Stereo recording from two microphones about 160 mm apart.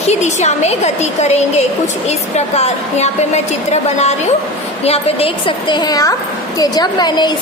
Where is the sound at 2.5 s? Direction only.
45° left (ahead or behind); by 7.3 s 25° left (ahead or behind).